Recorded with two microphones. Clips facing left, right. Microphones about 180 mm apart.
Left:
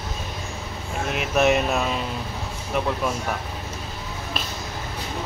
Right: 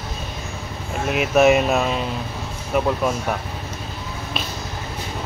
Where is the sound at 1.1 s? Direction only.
5° right (ahead or behind).